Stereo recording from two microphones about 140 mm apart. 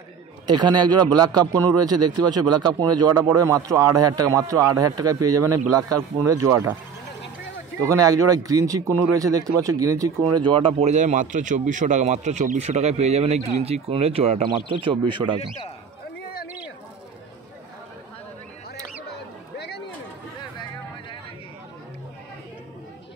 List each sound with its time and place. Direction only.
0.5 s a man's voice: 30° right (ahead or behind)
7.8 s speech: 25° right (ahead or behind)